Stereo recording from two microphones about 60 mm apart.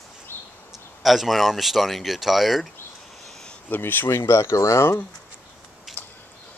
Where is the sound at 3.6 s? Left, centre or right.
Left.